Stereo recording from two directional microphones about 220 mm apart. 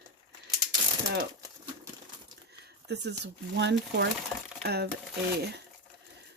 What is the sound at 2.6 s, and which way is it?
Speech, 50° right (ahead or behind).